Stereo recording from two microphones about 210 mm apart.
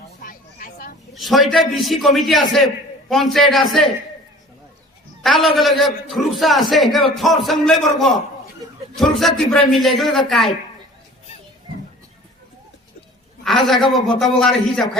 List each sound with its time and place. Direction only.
0.2 s a sound: 40° left (ahead or behind)
1.1 s a man's voice: centre (ahead or behind)
5.2 s a man's voice: centre (ahead or behind)
13.4 s a man's voice: centre (ahead or behind)